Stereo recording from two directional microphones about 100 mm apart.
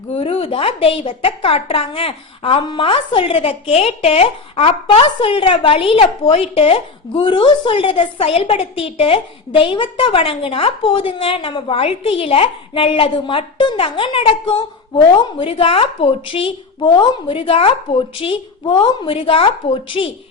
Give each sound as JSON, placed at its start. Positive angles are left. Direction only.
{"t": 0.1, "sound": "a woman's voice", "side_deg": 80}